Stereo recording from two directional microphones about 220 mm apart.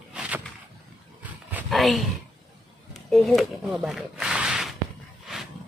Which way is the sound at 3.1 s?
Centre (ahead or behind).